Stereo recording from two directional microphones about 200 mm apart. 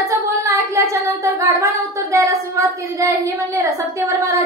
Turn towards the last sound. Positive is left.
turn(degrees=-15)  # may be behind; listen again after turning